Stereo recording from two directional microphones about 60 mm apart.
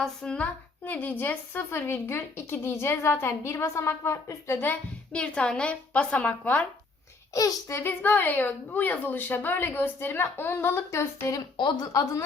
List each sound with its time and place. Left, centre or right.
0.0 s a woman's voice: centre
0.3 s a woman's voice: left
4.5 s a woman's voice: left
5.1 s speech: centre
7.7 s a woman's voice: left
11.9 s a woman's voice: left